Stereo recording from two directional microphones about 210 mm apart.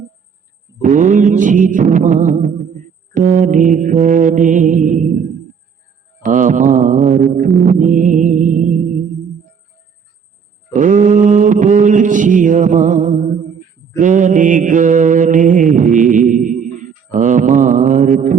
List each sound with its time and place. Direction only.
0.8 s music: 35° right (ahead or behind)
6.2 s music: 35° right (ahead or behind)
10.7 s mantra: 40° right (ahead or behind)